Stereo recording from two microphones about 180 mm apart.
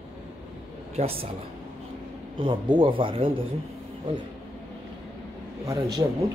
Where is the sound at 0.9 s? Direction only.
35° right (ahead or behind).